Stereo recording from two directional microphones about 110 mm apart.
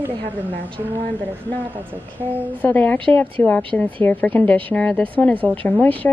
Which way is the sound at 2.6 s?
15° left (ahead or behind).